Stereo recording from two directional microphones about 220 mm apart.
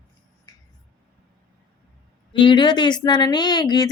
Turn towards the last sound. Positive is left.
turn(degrees=20)  # may be behind; listen again after turning